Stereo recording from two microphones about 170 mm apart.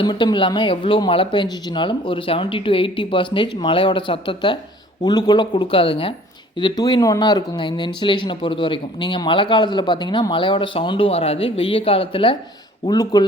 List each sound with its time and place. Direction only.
0.0 s speech: 25° left (ahead or behind)